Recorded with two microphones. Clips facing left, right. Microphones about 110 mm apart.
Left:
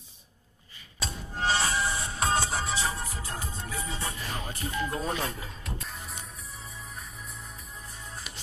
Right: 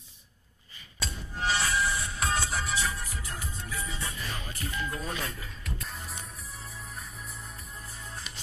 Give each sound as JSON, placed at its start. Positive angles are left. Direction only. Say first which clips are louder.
{"t": 1.0, "sound": "music", "louder": "left 2 dB", "side_deg": 30}
{"t": 5.9, "sound": "music", "louder": "even", "side_deg": 0}